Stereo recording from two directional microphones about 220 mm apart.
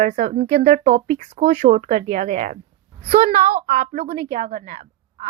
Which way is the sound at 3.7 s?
35° right (ahead or behind).